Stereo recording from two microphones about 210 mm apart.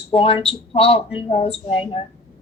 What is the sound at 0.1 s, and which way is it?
A woman's voice, 25° left (ahead or behind).